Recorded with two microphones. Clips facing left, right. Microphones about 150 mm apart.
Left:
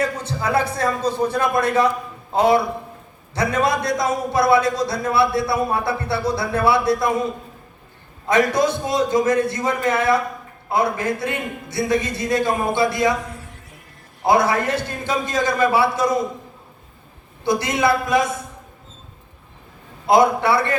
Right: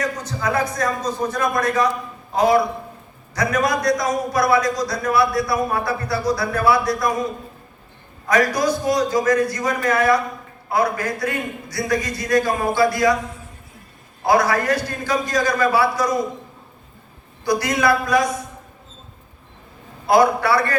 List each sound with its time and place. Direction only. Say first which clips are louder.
0.2 s a man's voice: left 1 dB; 30° left (ahead or behind)
8.3 s a man's voice: left 1 dB; 25° left (ahead or behind)
14.3 s a man's voice: even; 25° left (ahead or behind)
17.4 s a man's voice: even; 25° left (ahead or behind)
20.1 s a man's voice: even; 25° left (ahead or behind)